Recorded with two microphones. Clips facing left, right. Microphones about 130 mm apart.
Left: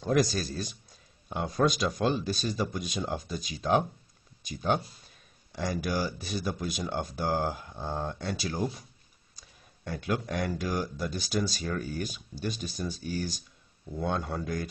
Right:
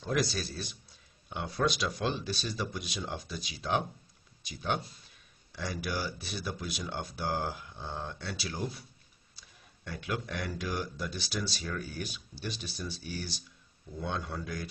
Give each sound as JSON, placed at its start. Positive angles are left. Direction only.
{"t": 0.0, "sound": "speech", "side_deg": 45}